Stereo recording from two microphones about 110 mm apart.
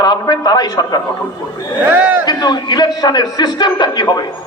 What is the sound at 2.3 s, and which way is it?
A man's voice, 40° left (ahead or behind).